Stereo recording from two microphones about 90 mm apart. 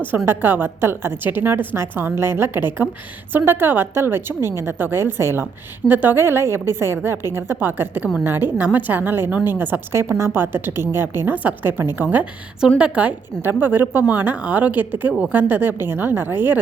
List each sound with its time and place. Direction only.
0.3 s a woman's voice: 25° right (ahead or behind)
12.1 s a woman's voice: 10° right (ahead or behind)